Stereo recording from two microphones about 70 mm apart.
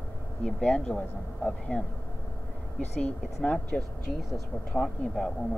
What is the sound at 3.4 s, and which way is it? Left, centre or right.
Speech, centre.